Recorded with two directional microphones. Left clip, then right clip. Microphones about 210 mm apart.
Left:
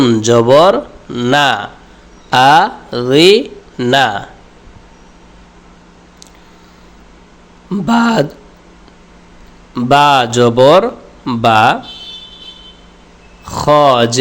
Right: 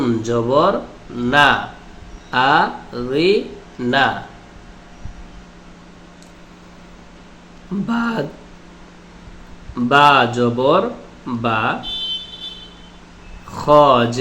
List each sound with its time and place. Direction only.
0.0 s speech: 45° left (ahead or behind)
7.9 s speech: 50° left (ahead or behind)
9.7 s speech: 50° left (ahead or behind)
13.5 s speech: 50° left (ahead or behind)